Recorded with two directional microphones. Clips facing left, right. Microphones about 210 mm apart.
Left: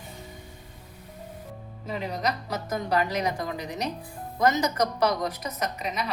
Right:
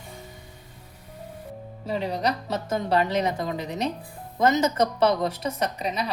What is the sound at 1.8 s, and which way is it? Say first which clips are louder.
A woman's voice: right 3 dB; 30° right (ahead or behind).